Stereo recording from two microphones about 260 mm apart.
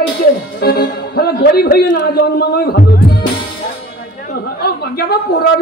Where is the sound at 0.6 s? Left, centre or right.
Left.